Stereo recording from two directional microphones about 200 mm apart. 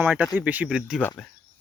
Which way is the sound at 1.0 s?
10° left (ahead or behind).